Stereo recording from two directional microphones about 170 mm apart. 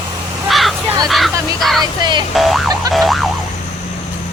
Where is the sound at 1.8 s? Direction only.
25° right (ahead or behind).